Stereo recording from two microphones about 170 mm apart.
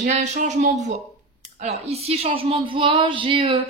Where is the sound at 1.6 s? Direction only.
40° right (ahead or behind).